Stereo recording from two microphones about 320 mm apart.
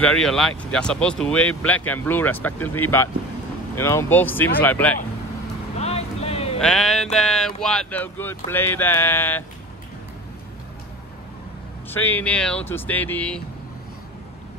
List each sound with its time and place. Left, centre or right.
0.0 s speech: centre
5.8 s vehicle: centre
6.6 s speech: centre
11.9 s speech: centre